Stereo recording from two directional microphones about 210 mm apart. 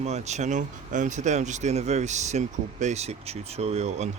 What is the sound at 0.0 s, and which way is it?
Speech, 30° right (ahead or behind).